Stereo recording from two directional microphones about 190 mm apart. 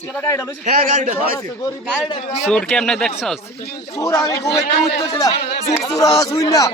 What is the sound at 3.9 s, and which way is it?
Speech, 15° left (ahead or behind).